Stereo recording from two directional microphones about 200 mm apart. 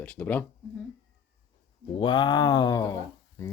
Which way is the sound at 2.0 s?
20° left (ahead or behind).